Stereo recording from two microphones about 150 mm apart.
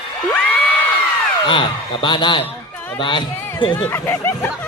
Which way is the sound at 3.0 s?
30° left (ahead or behind).